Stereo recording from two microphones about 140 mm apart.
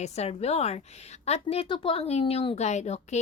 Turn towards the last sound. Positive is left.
turn(degrees=55)  # may be behind; listen again after turning